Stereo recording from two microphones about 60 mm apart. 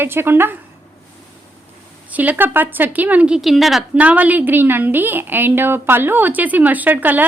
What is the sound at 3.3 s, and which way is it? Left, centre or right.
Speech, centre.